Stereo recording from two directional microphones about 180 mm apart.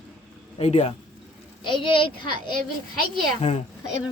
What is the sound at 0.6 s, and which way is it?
A man's voice, 35° left (ahead or behind).